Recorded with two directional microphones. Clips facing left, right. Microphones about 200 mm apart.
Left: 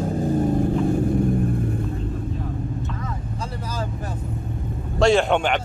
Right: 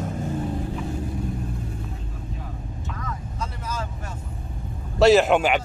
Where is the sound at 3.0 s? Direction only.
30° left (ahead or behind).